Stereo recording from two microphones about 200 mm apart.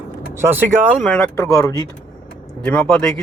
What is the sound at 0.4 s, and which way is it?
Speech, 10° right (ahead or behind).